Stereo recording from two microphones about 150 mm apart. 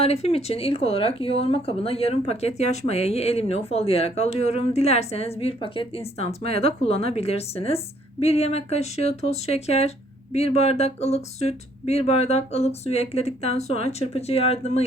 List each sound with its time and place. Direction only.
0.0 s speech: 45° left (ahead or behind)